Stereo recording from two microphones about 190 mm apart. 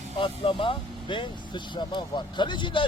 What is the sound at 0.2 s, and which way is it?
Speech, 25° left (ahead or behind).